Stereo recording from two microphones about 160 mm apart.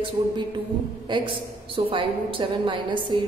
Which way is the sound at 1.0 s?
30° right (ahead or behind).